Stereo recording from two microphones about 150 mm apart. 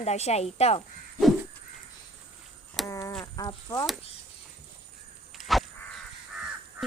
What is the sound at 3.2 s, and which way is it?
Speech, 25° left (ahead or behind).